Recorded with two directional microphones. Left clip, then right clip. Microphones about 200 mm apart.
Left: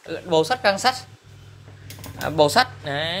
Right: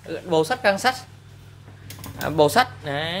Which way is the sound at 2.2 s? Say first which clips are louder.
Even; 20° right (ahead or behind).